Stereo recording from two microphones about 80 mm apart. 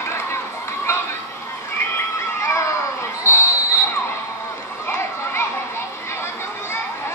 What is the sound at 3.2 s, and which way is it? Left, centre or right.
Basketball bounce, left.